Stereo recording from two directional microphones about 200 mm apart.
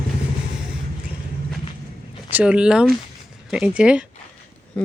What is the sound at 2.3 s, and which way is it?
Speech, 5° right (ahead or behind).